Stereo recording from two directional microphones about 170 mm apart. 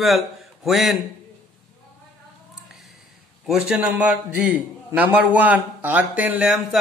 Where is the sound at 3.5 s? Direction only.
5° right (ahead or behind).